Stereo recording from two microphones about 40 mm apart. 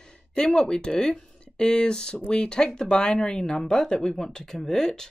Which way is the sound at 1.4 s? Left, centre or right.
Left.